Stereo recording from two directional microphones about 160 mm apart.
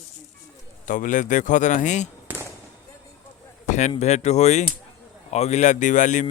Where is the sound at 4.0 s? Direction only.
45° left (ahead or behind).